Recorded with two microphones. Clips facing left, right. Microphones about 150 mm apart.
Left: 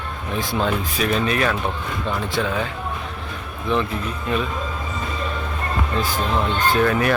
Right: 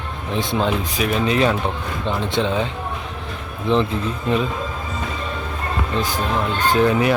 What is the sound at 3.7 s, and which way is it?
Speech, 25° right (ahead or behind).